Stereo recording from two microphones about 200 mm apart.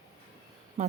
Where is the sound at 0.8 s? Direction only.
35° right (ahead or behind).